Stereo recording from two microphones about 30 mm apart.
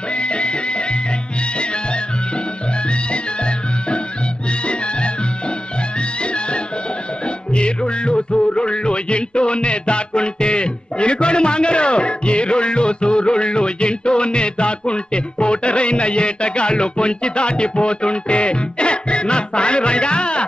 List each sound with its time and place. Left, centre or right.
0.1 s music: left
2.9 s music: left